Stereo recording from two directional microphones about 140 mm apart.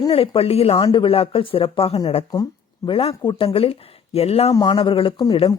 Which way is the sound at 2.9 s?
45° left (ahead or behind).